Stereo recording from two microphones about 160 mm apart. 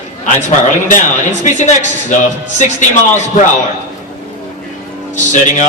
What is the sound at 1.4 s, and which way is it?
A man's voice, 50° left (ahead or behind).